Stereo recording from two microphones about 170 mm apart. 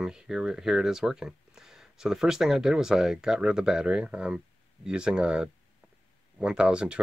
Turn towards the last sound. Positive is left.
turn(degrees=-5)  # may be behind; listen again after turning